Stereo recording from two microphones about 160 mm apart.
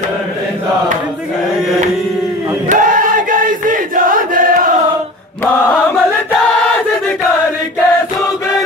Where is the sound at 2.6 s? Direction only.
55° right (ahead or behind).